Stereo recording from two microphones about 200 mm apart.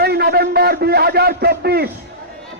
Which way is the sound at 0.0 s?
50° right (ahead or behind).